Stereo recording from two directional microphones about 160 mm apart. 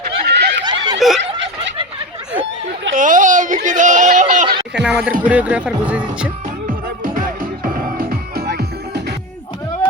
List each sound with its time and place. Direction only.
0.0 s a sound: 80° right
0.6 s snicker: 30° right (ahead or behind)
0.9 s snicker: centre (ahead or behind)
2.9 s speech: 55° right (ahead or behind)
4.8 s speech: 5° right (ahead or behind)
7.0 s music: 60° right (ahead or behind); by 9.1 s 90° right